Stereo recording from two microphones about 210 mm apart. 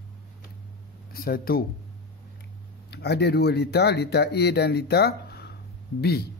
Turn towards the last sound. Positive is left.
turn(degrees=50)  # may be behind; listen again after turning